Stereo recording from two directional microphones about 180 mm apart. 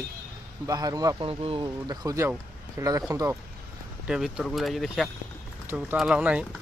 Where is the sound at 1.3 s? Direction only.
30° right (ahead or behind).